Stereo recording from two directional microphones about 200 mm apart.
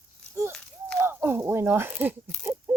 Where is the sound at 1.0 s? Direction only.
10° right (ahead or behind).